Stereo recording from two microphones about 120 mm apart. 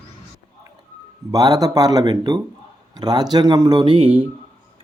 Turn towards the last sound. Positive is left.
turn(degrees=-45)  # may be behind; listen again after turning